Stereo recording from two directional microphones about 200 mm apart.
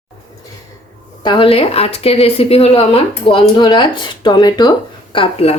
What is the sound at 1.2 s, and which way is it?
A woman's voice, 25° left (ahead or behind).